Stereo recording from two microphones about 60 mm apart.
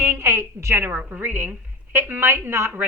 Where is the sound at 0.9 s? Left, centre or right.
Right.